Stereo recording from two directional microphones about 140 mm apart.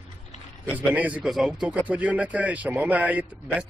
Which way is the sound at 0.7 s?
10° right (ahead or behind).